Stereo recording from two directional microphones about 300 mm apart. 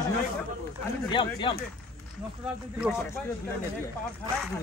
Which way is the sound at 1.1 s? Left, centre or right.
Centre.